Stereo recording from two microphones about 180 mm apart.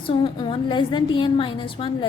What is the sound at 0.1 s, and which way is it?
A woman's voice, 30° left (ahead or behind).